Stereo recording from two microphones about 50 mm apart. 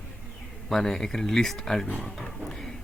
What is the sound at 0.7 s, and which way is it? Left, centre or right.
Speech, centre.